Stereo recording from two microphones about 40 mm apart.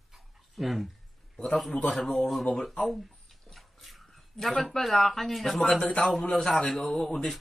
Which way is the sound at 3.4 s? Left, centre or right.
Centre.